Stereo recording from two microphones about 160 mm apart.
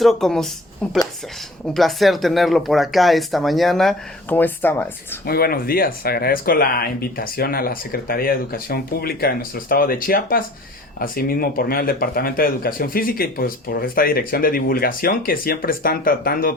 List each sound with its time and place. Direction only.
0.0 s speech: centre (ahead or behind)
1.6 s speech: centre (ahead or behind)
4.4 s speech: 10° left (ahead or behind)
5.2 s speech: 70° left (ahead or behind)